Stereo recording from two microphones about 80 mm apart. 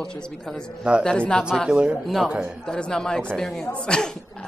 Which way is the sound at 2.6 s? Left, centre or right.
Centre.